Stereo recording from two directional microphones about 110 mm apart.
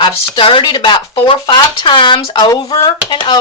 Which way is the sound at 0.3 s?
50° left (ahead or behind).